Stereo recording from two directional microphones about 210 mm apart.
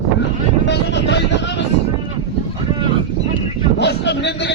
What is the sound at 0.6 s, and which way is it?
Speech, 55° left (ahead or behind).